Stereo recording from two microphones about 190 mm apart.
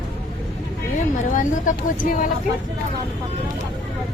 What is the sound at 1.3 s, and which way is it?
Speech, 45° left (ahead or behind).